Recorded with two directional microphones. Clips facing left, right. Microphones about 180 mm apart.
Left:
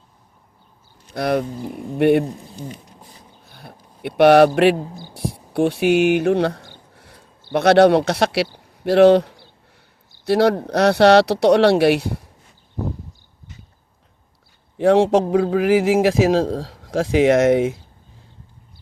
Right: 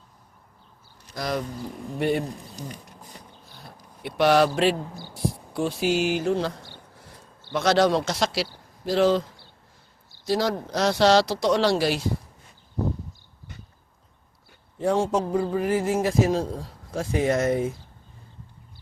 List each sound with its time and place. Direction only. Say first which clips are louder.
1.1 s speech: left 8 dB; 60° left (ahead or behind)
4.0 s speech: left 8 dB; 60° left (ahead or behind)
14.8 s a man's voice: left 9 dB; 85° left